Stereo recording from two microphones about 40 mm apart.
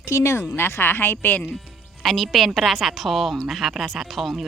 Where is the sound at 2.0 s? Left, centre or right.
Centre.